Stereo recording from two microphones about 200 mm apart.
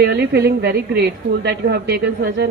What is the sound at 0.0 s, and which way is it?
A woman's voice, 55° right (ahead or behind).